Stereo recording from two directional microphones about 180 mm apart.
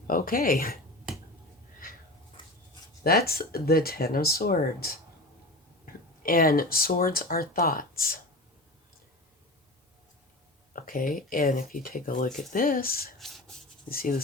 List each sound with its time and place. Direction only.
0.1 s speech: 50° left (ahead or behind)
3.0 s speech: 60° left (ahead or behind)
10.8 s speech: 50° left (ahead or behind)
13.1 s rub: centre (ahead or behind)
13.9 s speech: 55° left (ahead or behind)